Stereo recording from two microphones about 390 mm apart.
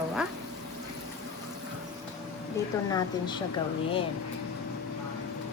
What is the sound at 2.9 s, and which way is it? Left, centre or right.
Speech, centre.